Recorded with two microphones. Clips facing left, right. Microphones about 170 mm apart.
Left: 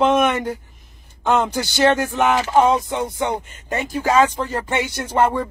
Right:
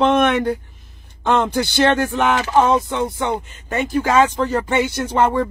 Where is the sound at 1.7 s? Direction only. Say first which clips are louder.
Left 1 dB; 10° left (ahead or behind).